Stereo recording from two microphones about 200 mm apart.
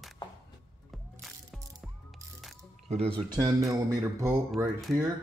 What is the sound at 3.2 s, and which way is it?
Speech, 25° right (ahead or behind).